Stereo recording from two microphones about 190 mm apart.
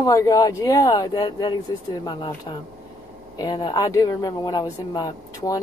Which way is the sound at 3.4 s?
20° left (ahead or behind).